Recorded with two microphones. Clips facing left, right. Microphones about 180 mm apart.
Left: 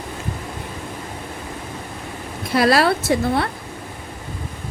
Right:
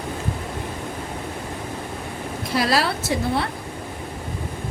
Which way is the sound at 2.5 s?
60° left (ahead or behind).